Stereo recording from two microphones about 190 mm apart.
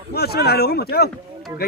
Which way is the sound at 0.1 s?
55° left (ahead or behind).